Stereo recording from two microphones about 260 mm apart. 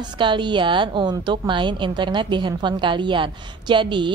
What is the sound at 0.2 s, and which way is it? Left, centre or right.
A woman's voice, centre.